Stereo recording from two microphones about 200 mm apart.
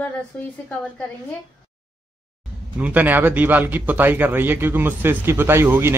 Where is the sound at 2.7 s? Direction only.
5° right (ahead or behind).